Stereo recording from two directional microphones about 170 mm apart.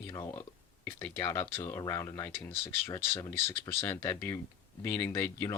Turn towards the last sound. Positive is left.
turn(degrees=15)  # may be behind; listen again after turning